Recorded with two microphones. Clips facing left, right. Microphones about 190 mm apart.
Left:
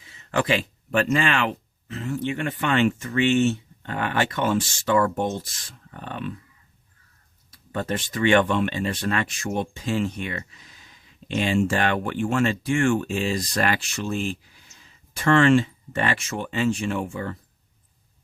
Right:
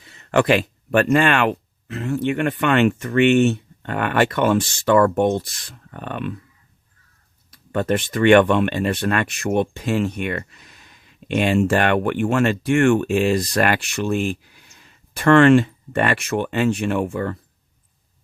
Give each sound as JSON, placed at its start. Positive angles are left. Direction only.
{"t": 0.0, "sound": "speech", "side_deg": -60}
{"t": 7.7, "sound": "speech", "side_deg": -65}